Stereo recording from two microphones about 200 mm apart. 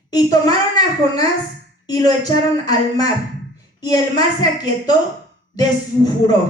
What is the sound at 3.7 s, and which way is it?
A child's voice, 20° left (ahead or behind).